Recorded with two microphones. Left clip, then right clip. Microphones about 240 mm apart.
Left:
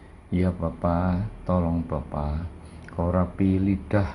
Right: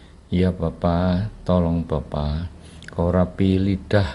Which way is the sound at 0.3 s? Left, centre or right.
Right.